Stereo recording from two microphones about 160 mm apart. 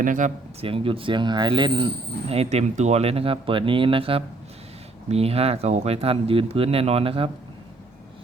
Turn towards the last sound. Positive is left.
turn(degrees=-35)  # may be behind; listen again after turning